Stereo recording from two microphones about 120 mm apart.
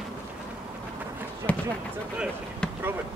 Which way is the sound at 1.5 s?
10° left (ahead or behind).